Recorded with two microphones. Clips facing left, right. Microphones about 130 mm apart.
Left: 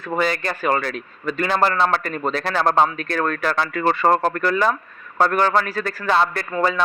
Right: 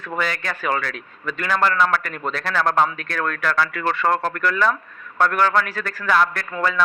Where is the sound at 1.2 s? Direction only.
30° left (ahead or behind).